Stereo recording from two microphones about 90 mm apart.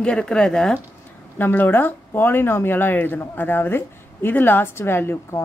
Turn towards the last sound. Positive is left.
turn(degrees=25)  # may be behind; listen again after turning